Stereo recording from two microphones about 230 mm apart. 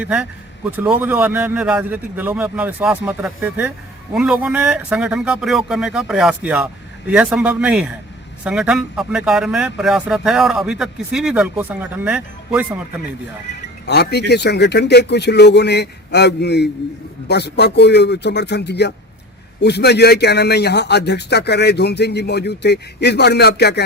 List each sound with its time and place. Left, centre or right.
0.0 s a man's voice: centre
13.8 s a man's voice: left